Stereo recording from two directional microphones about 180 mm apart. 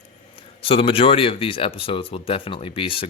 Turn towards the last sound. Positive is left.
turn(degrees=30)  # may be behind; listen again after turning